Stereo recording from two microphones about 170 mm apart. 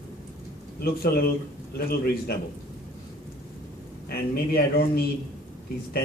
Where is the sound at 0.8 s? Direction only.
65° left (ahead or behind).